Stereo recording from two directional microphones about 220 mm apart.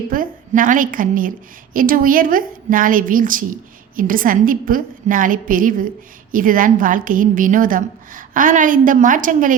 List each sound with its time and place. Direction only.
0.1 s a woman's voice: 40° right (ahead or behind)